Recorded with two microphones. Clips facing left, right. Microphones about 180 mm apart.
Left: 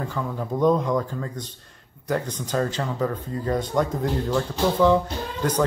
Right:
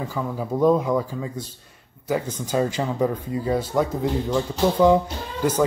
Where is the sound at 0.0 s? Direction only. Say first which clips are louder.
Right 1 dB; 5° right (ahead or behind).